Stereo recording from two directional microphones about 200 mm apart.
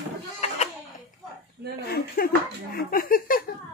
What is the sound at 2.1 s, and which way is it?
Speech, 45° left (ahead or behind).